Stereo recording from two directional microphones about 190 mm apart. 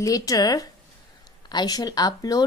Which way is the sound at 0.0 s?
20° left (ahead or behind).